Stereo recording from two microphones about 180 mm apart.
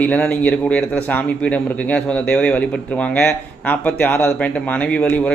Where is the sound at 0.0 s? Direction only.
10° left (ahead or behind).